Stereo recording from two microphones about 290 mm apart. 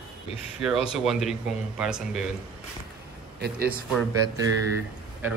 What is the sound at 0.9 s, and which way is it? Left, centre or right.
Speech, centre.